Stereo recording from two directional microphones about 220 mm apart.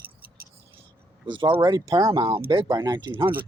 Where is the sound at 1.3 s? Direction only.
20° right (ahead or behind).